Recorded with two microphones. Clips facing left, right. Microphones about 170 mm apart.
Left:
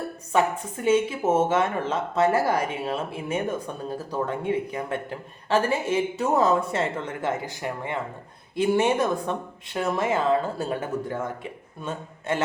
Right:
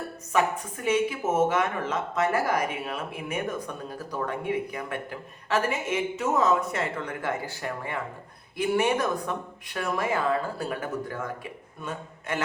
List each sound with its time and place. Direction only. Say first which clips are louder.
0.3 s a man's voice: left 2 dB; 30° left (ahead or behind)